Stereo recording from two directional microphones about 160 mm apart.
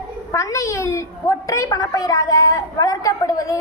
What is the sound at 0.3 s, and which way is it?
A woman's voice, 20° left (ahead or behind).